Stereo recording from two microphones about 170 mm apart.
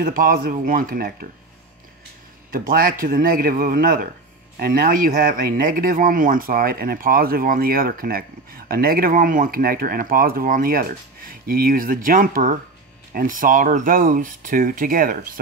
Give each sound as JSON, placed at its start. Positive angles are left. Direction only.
{"t": 0.0, "sound": "speech", "side_deg": -55}
{"t": 2.5, "sound": "speech", "side_deg": -55}